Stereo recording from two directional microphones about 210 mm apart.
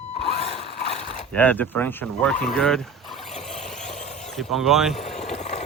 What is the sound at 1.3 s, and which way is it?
Speech, 10° left (ahead or behind).